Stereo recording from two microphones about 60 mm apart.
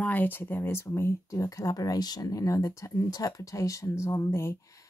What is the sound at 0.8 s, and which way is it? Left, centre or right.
Speech, left.